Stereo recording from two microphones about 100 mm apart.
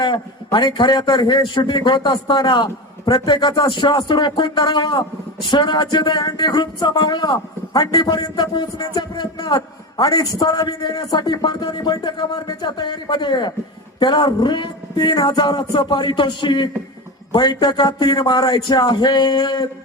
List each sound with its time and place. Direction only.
0.0 s speech: 50° left (ahead or behind)